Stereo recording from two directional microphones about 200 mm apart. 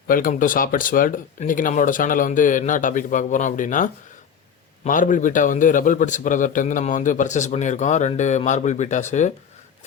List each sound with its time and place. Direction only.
0.1 s a man's voice: 40° left (ahead or behind)